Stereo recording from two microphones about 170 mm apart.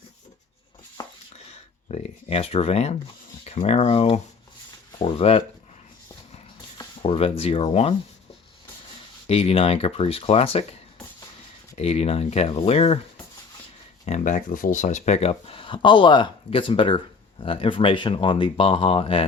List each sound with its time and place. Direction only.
1.0 s a sound: 25° left (ahead or behind)
1.5 s speech: 40° left (ahead or behind)
6.7 s speech: 35° left (ahead or behind)
9.2 s speech: 35° left (ahead or behind)
11.8 s speech: 35° left (ahead or behind)
14.0 s speech: 45° left (ahead or behind)